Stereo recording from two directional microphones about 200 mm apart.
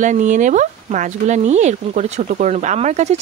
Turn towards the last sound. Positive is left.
turn(degrees=-35)  # may be behind; listen again after turning